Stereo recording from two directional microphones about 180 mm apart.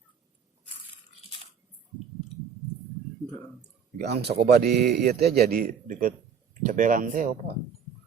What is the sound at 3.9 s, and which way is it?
A man's voice, 65° right (ahead or behind).